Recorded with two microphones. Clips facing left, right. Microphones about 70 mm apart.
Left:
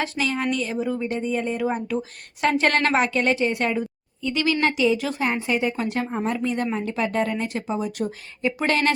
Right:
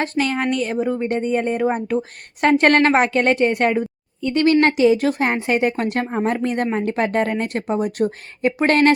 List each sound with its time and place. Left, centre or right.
0.0 s speech: right